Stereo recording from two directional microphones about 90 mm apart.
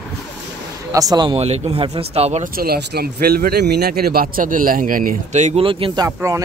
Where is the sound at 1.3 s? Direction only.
70° right (ahead or behind).